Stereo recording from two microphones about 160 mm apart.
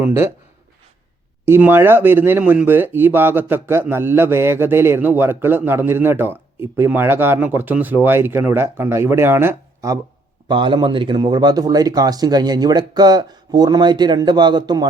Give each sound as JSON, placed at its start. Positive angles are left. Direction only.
{"t": 0.0, "sound": "speech", "side_deg": -15}
{"t": 1.5, "sound": "speech", "side_deg": -15}
{"t": 10.5, "sound": "speech", "side_deg": -30}